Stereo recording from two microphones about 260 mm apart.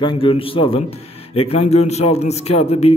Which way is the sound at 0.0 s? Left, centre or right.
Centre.